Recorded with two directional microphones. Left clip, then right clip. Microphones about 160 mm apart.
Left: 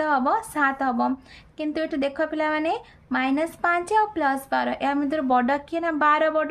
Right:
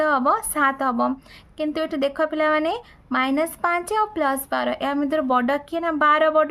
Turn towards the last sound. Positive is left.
turn(degrees=-25)  # may be behind; listen again after turning